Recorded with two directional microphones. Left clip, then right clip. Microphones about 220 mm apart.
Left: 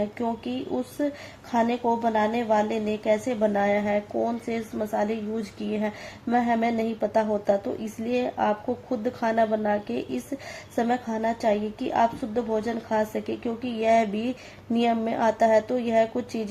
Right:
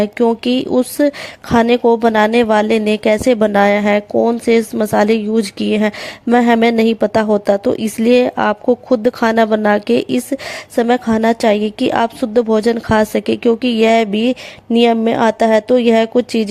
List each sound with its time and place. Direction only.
0.0 s speech: 45° right (ahead or behind)